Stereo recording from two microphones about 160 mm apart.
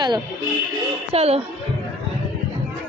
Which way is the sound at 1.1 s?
40° right (ahead or behind).